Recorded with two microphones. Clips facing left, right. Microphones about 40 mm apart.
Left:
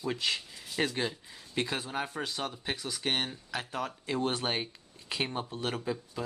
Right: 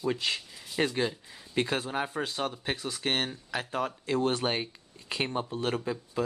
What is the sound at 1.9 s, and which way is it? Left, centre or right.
Speech, centre.